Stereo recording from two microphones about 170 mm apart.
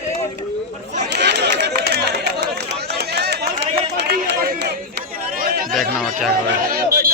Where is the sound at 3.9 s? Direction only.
80° right.